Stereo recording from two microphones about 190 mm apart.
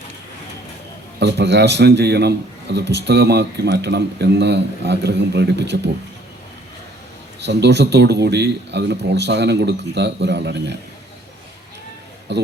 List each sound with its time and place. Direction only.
1.2 s a man's voice: 65° right (ahead or behind)
7.4 s a man's voice: 65° right (ahead or behind)
12.3 s a man's voice: 65° right (ahead or behind)